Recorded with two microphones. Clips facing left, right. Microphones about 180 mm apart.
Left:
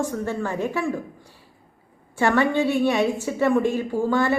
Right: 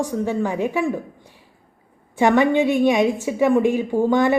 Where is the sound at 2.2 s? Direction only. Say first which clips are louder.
Right 4 dB; 15° right (ahead or behind).